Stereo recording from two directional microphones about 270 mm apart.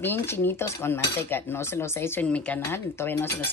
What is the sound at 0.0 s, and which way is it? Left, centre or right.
Speech, centre.